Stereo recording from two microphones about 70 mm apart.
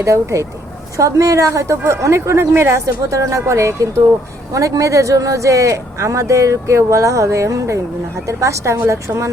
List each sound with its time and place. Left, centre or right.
0.0 s speech: right